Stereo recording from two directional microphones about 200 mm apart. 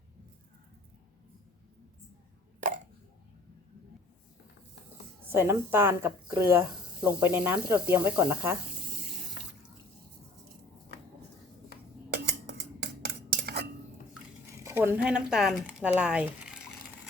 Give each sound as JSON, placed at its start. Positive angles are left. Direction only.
{"t": 5.3, "sound": "speech", "side_deg": -10}
{"t": 12.1, "sound": "scissors", "side_deg": -55}
{"t": 13.4, "sound": "cutlery", "side_deg": -50}
{"t": 14.5, "sound": "speech", "side_deg": -15}